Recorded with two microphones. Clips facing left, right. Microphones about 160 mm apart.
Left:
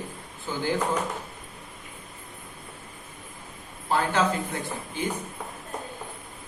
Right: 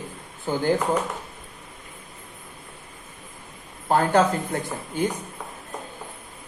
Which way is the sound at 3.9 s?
45° right (ahead or behind).